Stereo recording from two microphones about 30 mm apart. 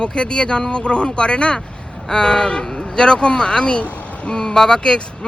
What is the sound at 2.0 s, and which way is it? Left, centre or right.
Speech, left.